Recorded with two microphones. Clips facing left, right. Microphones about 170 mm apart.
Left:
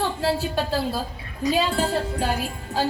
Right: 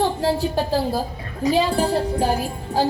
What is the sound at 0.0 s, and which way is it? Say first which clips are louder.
A woman's voice: right 4 dB; 15° right (ahead or behind).